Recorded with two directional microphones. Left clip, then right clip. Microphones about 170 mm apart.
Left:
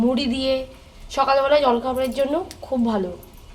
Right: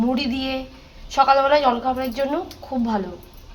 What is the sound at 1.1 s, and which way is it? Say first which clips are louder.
A woman's voice: right 2 dB; 40° left (ahead or behind).